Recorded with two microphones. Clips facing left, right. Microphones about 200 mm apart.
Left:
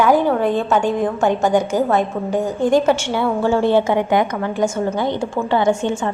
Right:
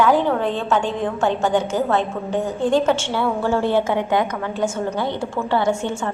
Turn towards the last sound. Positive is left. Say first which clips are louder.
# left 3 dB
turn(degrees=15)  # may be behind; listen again after turning